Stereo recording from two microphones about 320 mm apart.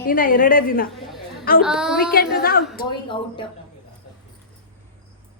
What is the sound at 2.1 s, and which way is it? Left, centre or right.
Speech, left.